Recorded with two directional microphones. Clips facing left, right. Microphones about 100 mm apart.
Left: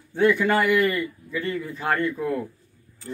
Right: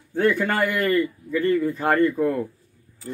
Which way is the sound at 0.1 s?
45° right (ahead or behind).